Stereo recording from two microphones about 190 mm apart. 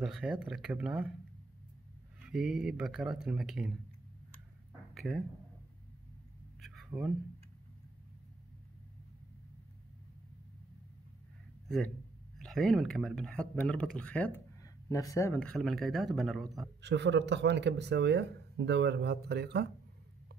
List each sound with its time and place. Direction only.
0.0 s speech: 5° right (ahead or behind)
2.2 s speech: centre (ahead or behind)
4.9 s speech: centre (ahead or behind)
6.6 s a sound: centre (ahead or behind)
12.4 s speech: centre (ahead or behind)
16.8 s speech: 65° right (ahead or behind)